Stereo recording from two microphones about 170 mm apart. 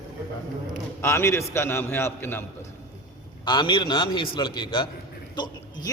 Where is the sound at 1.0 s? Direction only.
15° left (ahead or behind).